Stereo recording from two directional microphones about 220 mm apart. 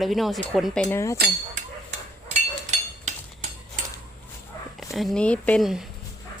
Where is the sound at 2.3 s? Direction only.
30° right (ahead or behind).